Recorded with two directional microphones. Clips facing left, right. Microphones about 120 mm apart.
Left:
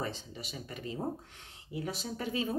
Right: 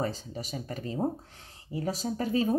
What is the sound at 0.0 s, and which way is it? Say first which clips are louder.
Speech: right 6 dB; 40° right (ahead or behind).